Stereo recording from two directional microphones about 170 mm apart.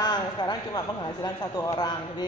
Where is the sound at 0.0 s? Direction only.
25° left (ahead or behind).